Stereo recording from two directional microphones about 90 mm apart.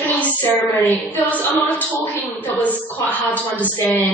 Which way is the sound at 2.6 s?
15° left (ahead or behind).